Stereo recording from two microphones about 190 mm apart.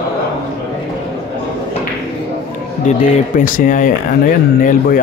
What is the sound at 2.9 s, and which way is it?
Speech, 45° left (ahead or behind).